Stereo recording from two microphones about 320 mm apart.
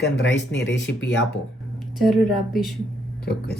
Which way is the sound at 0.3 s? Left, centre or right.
Left.